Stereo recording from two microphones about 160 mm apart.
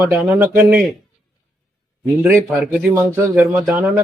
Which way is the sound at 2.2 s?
10° right (ahead or behind).